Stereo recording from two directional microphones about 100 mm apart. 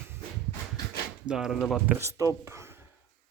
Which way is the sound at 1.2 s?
5° right (ahead or behind).